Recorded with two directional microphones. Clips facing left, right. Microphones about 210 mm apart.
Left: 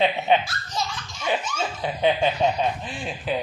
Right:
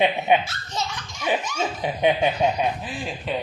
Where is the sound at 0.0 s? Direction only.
15° right (ahead or behind).